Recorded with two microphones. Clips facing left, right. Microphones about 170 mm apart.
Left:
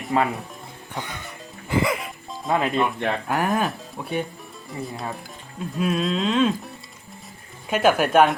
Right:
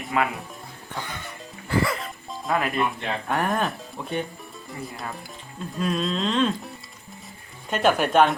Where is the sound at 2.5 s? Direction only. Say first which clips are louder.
Left 3 dB; 25° left (ahead or behind).